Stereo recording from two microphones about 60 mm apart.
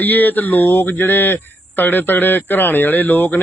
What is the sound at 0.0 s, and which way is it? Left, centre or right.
Speech, left.